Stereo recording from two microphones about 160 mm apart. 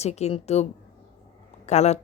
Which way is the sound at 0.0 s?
40° left (ahead or behind).